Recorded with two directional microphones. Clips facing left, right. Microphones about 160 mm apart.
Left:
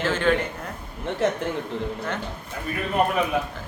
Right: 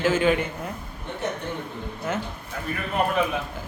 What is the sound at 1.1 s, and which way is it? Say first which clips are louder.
Speech: left 6 dB; 90° left.